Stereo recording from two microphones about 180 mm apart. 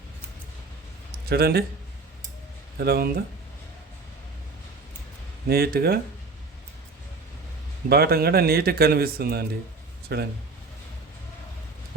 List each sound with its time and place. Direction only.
1.1 s a sound: 60° right (ahead or behind)
2.7 s speech: 60° right (ahead or behind)
5.5 s speech: 60° right (ahead or behind)
7.9 s speech: 60° right (ahead or behind)